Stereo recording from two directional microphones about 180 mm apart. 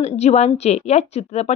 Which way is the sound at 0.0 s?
35° left (ahead or behind).